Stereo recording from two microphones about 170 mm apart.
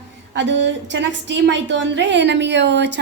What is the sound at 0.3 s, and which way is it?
A woman's voice, 90° right.